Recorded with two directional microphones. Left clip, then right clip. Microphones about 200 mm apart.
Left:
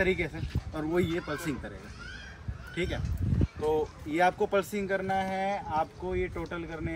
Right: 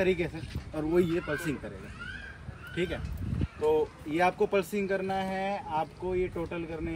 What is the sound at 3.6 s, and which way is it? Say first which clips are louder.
A man's voice: right 3 dB; centre (ahead or behind).